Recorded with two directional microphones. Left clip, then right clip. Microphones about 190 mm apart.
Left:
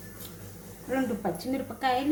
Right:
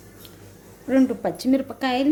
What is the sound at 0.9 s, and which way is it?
Speech, 45° right (ahead or behind).